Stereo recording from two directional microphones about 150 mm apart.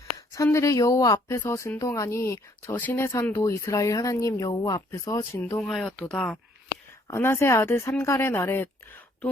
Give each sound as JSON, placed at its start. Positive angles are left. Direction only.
{"t": 0.3, "sound": "speech", "side_deg": 20}
{"t": 5.6, "sound": "speech", "side_deg": 5}